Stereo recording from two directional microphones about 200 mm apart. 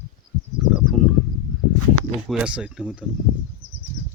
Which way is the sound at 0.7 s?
Centre (ahead or behind).